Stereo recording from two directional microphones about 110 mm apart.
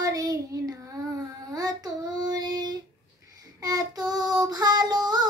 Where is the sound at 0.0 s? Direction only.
35° right (ahead or behind).